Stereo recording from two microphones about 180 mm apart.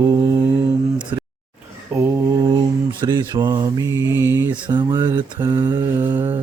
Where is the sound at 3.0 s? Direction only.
20° right (ahead or behind).